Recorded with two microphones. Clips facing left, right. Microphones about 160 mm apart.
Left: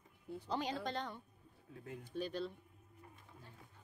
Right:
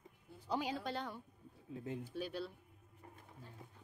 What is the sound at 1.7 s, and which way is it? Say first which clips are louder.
Speech: right 6 dB; 25° right (ahead or behind).